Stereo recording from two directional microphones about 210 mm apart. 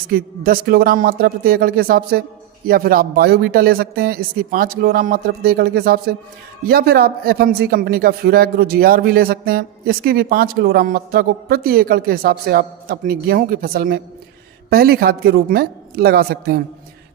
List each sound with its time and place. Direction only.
0.1 s a man's voice: 45° right (ahead or behind)